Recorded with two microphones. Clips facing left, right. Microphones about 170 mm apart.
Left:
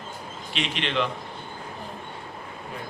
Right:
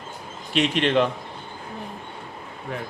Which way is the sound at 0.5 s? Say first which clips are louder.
Right 8 dB; 45° right (ahead or behind).